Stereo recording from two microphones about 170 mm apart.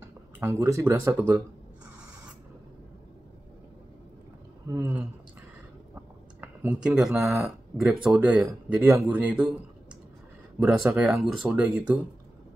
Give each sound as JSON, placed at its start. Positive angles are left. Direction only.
{"t": 0.4, "sound": "speech", "side_deg": -15}
{"t": 4.6, "sound": "speech", "side_deg": -20}
{"t": 6.4, "sound": "speech", "side_deg": -10}
{"t": 10.6, "sound": "speech", "side_deg": -5}